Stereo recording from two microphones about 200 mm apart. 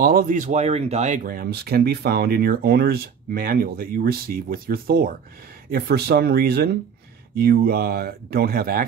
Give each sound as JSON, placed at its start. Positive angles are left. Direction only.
{"t": 0.0, "sound": "speech", "side_deg": -45}